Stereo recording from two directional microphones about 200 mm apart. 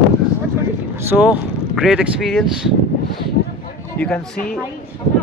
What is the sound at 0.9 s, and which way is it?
Speech, 10° right (ahead or behind).